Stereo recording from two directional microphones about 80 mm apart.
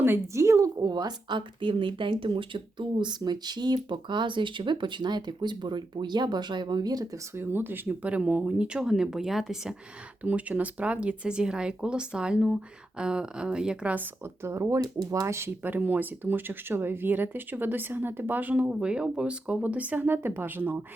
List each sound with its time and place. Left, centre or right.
0.0 s a woman's voice: right
0.8 s speech: right
7.3 s speech: right; by 9.7 s centre
10.2 s speech: centre
13.9 s speech: right
14.5 s speech: right